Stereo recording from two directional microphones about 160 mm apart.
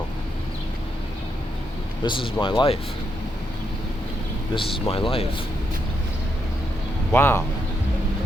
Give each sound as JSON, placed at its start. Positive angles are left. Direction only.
{"t": 2.0, "sound": "speech", "side_deg": 30}
{"t": 4.5, "sound": "speech", "side_deg": 35}
{"t": 7.1, "sound": "speech", "side_deg": 15}